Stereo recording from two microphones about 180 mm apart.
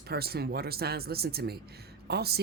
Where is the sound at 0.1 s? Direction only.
60° right (ahead or behind).